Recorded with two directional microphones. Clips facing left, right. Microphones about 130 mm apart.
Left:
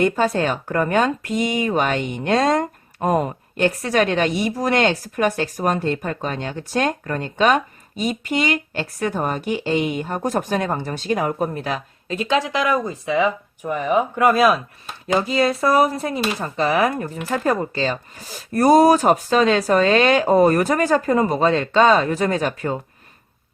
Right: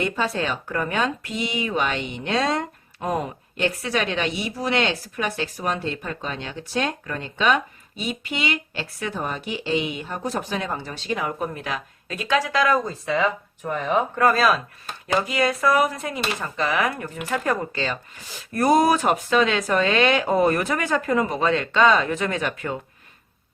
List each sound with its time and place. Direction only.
0.0 s speech: 45° left (ahead or behind); by 14.6 s 15° left (ahead or behind)
15.0 s speech: 30° left (ahead or behind)